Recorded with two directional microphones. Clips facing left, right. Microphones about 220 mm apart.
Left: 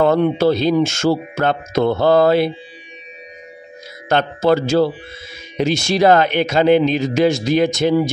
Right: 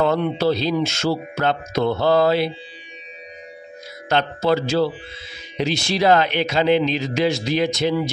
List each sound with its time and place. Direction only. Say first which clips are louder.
0.0 s speech: left 5 dB; 50° left (ahead or behind)
4.1 s speech: left 4 dB; 50° left (ahead or behind)